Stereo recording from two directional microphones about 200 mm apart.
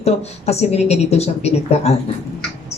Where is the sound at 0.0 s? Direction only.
30° left (ahead or behind).